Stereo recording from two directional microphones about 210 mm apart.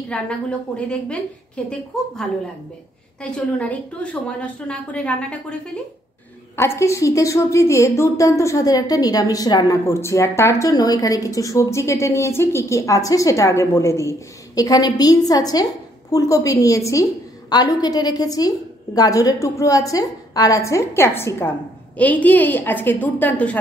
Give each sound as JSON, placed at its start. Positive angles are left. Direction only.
{"t": 0.1, "sound": "a woman's voice", "side_deg": 5}
{"t": 3.2, "sound": "a woman's voice", "side_deg": 5}
{"t": 6.5, "sound": "a woman's voice", "side_deg": 10}